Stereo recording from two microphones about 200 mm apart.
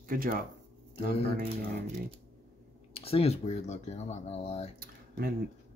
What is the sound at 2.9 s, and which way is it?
Speech, 30° left (ahead or behind).